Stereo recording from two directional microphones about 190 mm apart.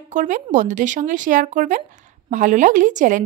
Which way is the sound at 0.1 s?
40° right (ahead or behind).